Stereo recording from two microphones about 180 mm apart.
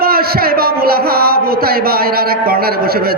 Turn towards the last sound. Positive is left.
turn(degrees=-60)  # may be behind; listen again after turning